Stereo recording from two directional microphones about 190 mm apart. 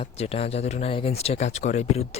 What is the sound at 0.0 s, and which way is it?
Speech, 30° left (ahead or behind).